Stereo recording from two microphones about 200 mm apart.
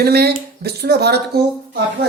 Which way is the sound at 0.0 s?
55° right (ahead or behind).